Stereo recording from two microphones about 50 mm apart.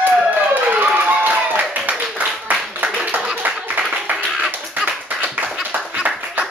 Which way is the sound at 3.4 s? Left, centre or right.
Right.